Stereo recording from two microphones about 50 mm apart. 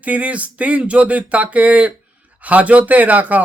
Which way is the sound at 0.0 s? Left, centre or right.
Right.